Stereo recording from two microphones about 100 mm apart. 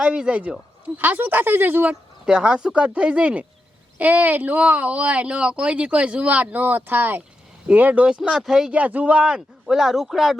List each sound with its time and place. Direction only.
0.0 s speech: 10° right (ahead or behind)
2.2 s speech: 5° right (ahead or behind)